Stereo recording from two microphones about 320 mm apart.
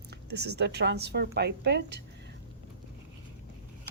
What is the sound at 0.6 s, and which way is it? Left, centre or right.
Speech, right.